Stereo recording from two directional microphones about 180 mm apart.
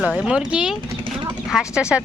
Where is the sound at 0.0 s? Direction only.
5° right (ahead or behind).